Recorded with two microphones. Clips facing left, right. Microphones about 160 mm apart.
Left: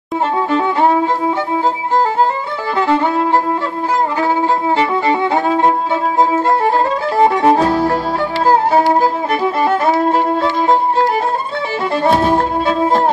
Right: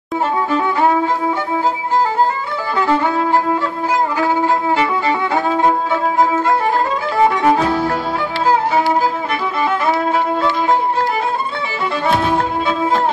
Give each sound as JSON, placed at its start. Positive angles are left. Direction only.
{"t": 0.5, "sound": "violin", "side_deg": 25}
{"t": 2.9, "sound": "violin", "side_deg": 25}
{"t": 6.1, "sound": "music", "side_deg": 30}
{"t": 9.0, "sound": "violin", "side_deg": 40}
{"t": 11.9, "sound": "music", "side_deg": 40}